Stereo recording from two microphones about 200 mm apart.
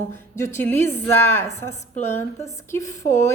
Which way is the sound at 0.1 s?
15° left (ahead or behind).